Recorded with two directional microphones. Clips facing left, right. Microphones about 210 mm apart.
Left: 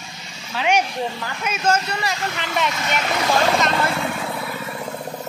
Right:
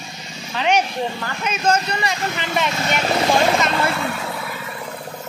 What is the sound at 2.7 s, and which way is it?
Speech, 35° right (ahead or behind).